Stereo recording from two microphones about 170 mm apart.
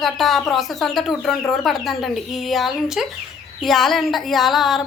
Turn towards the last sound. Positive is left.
turn(degrees=0)  # may be behind; listen again after turning